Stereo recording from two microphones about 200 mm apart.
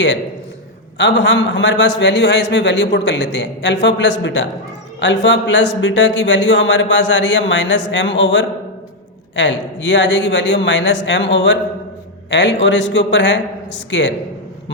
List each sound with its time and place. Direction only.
0.9 s a man's voice: 60° left (ahead or behind)